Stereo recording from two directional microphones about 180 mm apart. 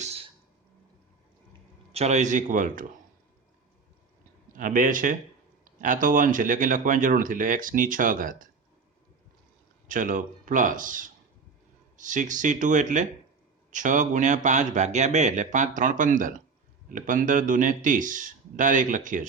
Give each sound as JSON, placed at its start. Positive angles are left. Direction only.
{"t": 0.0, "sound": "a sound", "side_deg": -35}
{"t": 1.9, "sound": "speech", "side_deg": -35}
{"t": 4.5, "sound": "speech", "side_deg": -45}
{"t": 9.8, "sound": "speech", "side_deg": -50}